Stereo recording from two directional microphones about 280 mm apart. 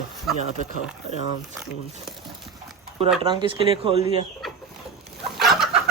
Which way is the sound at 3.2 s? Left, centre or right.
Centre.